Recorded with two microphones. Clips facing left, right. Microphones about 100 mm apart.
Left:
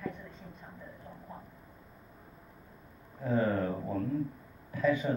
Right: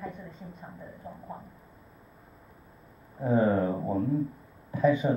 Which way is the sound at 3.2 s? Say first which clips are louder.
Right 5 dB; 20° right (ahead or behind).